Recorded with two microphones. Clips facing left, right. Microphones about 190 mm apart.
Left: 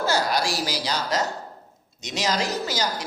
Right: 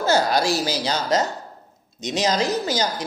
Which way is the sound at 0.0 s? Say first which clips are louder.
Right 4 dB; 20° right (ahead or behind).